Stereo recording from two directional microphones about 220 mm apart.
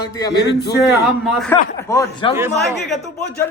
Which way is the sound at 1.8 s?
15° left (ahead or behind).